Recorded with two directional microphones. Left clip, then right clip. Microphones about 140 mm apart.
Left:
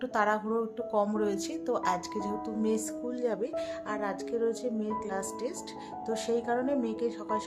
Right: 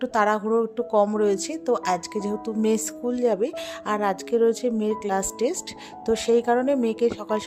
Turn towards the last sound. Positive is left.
turn(degrees=-70)  # may be behind; listen again after turning